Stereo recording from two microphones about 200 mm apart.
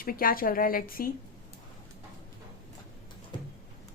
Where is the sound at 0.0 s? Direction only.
45° left (ahead or behind).